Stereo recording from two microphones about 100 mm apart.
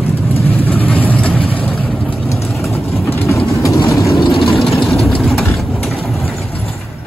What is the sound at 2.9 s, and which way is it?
Vehicle, 25° left (ahead or behind).